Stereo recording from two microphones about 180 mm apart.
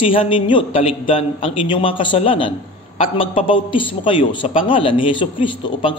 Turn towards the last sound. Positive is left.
turn(degrees=25)  # may be behind; listen again after turning